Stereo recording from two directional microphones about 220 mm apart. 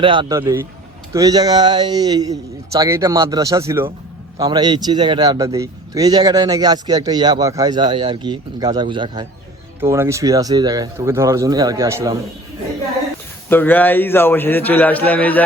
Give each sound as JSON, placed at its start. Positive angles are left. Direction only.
{"t": 0.0, "sound": "a man's voice", "side_deg": -20}
{"t": 13.5, "sound": "a man's voice", "side_deg": 10}